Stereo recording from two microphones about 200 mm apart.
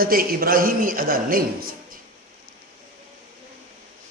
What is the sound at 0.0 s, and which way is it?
A man's voice, 45° right (ahead or behind).